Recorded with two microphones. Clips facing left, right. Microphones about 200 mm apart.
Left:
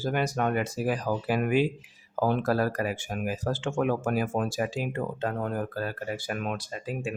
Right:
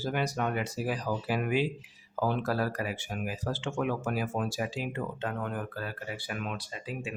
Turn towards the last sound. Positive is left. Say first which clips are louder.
# left 5 dB
turn(degrees=45)  # may be behind; listen again after turning